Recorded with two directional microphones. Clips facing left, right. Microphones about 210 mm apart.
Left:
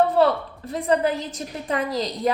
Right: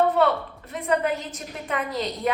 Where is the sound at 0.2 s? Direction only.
35° left (ahead or behind).